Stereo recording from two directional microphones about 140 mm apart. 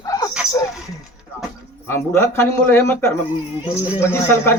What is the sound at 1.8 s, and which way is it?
A man's voice, 20° left (ahead or behind).